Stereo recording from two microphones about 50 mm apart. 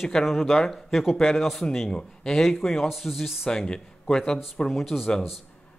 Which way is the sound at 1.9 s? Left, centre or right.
Centre.